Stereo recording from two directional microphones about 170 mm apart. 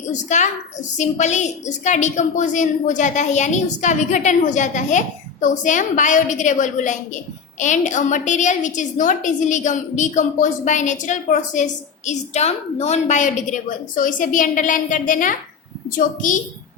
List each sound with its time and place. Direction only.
0.1 s a woman's voice: 45° left (ahead or behind)